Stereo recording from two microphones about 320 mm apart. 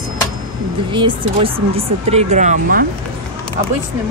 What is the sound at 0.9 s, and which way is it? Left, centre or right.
Speech, centre.